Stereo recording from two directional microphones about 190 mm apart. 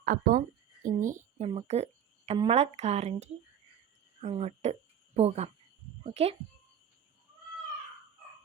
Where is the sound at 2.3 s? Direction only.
30° right (ahead or behind).